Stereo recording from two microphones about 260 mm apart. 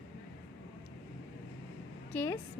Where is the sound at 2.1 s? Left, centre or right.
Centre.